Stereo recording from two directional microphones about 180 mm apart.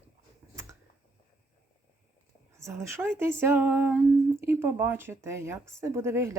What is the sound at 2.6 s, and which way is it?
Speech, 15° right (ahead or behind).